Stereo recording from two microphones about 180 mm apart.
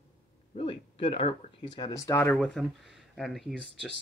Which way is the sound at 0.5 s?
30° left (ahead or behind).